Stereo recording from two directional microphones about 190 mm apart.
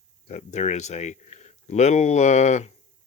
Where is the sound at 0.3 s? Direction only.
35° left (ahead or behind).